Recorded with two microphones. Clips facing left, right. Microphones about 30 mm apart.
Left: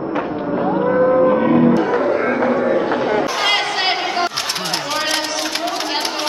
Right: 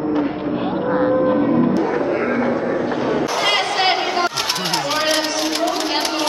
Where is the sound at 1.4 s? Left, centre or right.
Left.